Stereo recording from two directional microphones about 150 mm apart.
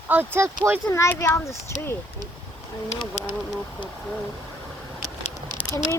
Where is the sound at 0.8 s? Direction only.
20° left (ahead or behind).